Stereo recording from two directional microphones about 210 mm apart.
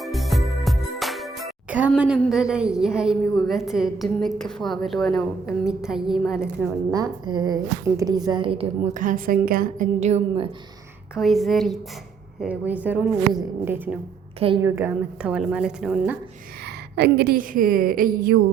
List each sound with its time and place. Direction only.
0.0 s speech: centre (ahead or behind)
6.9 s a woman's voice: 20° right (ahead or behind)
11.1 s a woman's voice: centre (ahead or behind)
14.3 s a woman's voice: 25° right (ahead or behind)
14.6 s a woman's voice: 10° right (ahead or behind)
16.9 s a woman's voice: 50° right (ahead or behind)